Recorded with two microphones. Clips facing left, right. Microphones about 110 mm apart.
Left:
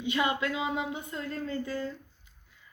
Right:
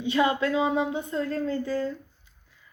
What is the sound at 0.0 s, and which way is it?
Speech, 30° right (ahead or behind).